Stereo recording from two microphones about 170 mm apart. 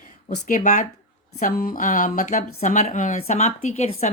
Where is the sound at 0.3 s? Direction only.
50° left (ahead or behind).